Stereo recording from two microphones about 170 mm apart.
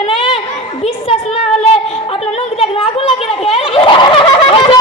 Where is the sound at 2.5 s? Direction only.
35° left (ahead or behind).